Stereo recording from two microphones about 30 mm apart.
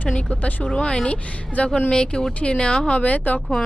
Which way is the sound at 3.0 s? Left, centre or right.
Left.